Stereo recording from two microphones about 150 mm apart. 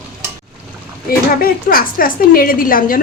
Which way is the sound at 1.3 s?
75° left (ahead or behind).